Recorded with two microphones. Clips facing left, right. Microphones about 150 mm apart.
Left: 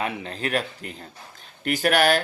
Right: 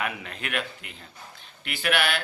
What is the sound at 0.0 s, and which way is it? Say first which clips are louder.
Speech: left 4 dB; 30° left (ahead or behind).